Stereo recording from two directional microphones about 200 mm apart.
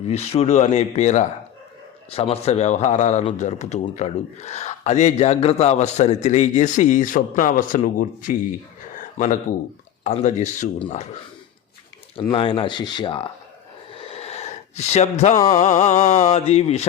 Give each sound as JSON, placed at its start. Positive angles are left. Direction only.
{"t": 0.0, "sound": "speech", "side_deg": 30}
{"t": 9.0, "sound": "a sound", "side_deg": 40}
{"t": 10.0, "sound": "speech", "side_deg": 35}
{"t": 12.2, "sound": "speech", "side_deg": 25}
{"t": 13.9, "sound": "a sound", "side_deg": 30}
{"t": 15.5, "sound": "speech", "side_deg": 35}